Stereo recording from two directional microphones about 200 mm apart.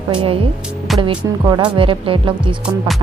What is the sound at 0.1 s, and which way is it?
Speech, 25° right (ahead or behind).